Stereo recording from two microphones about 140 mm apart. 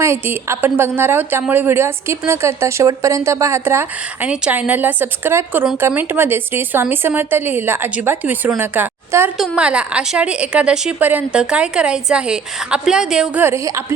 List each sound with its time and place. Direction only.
0.0 s a woman's voice: 20° right (ahead or behind)
13.4 s a woman's voice: 20° right (ahead or behind)